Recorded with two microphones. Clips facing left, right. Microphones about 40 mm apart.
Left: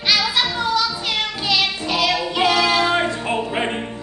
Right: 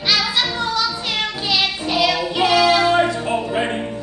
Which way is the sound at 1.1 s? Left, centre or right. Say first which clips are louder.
Even; centre.